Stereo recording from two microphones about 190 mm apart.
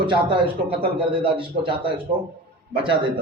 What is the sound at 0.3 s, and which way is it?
Speech, 30° right (ahead or behind).